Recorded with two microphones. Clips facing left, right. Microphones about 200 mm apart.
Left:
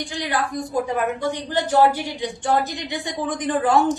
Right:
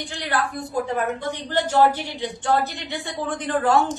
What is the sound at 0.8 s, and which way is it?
A woman's voice, 15° left (ahead or behind).